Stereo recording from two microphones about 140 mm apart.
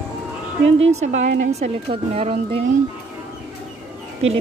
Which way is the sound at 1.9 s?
45° right (ahead or behind).